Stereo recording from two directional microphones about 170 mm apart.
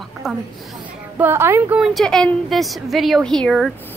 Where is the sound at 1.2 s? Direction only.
15° right (ahead or behind).